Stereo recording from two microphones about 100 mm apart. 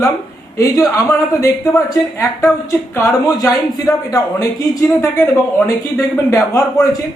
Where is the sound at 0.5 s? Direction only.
35° left (ahead or behind).